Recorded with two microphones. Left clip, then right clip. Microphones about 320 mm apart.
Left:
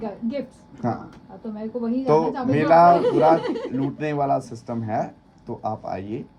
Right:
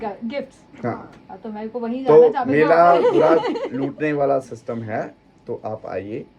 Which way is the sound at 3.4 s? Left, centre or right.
Centre.